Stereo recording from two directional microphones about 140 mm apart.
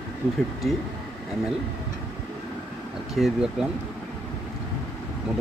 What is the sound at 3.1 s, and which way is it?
Speech, 5° right (ahead or behind).